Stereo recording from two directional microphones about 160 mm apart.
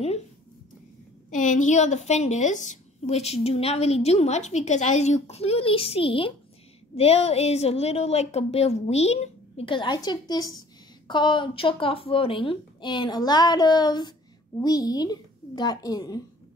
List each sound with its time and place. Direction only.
1.3 s a woman's voice: 55° left (ahead or behind); by 16.2 s 20° left (ahead or behind)